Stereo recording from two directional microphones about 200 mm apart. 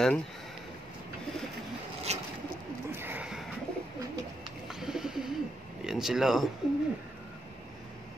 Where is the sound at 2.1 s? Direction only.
35° right (ahead or behind).